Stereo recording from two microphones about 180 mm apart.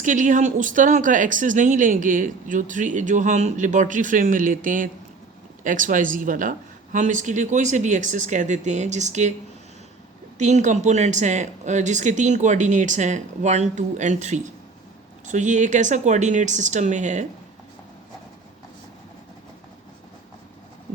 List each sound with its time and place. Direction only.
0.0 s speech: 45° right (ahead or behind)
10.3 s speech: 40° right (ahead or behind)